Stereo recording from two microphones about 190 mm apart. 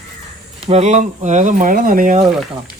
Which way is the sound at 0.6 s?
35° right (ahead or behind).